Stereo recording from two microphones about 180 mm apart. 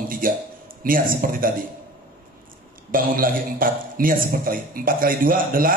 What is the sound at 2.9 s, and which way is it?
A man's voice, 50° right (ahead or behind).